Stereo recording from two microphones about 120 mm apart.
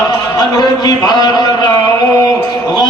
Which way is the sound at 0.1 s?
35° left (ahead or behind).